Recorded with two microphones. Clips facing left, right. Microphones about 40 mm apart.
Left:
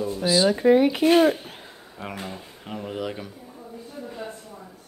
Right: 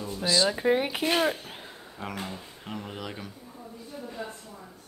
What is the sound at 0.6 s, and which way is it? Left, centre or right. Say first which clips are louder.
Speech: left 7 dB; centre.